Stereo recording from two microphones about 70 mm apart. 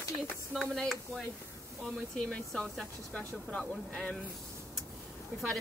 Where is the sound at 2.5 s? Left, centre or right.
Centre.